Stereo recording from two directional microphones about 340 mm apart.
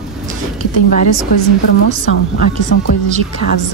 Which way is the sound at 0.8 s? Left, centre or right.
Left.